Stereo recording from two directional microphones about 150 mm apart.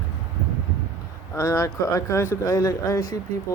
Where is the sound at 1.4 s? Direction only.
20° left (ahead or behind).